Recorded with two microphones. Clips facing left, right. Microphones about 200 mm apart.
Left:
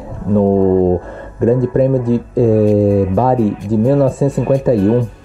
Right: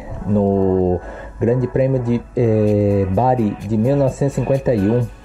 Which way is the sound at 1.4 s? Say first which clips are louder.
Left 4 dB; 40° left (ahead or behind).